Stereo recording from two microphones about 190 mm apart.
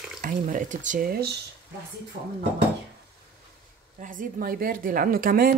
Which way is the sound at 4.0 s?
50° right (ahead or behind).